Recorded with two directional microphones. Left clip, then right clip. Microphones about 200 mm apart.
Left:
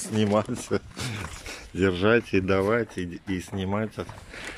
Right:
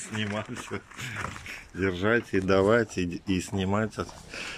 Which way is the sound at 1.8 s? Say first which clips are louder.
Left 4 dB; 10° left (ahead or behind).